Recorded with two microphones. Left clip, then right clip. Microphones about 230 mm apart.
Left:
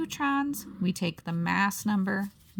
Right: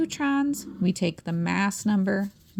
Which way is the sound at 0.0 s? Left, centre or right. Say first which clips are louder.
Right 3 dB; centre.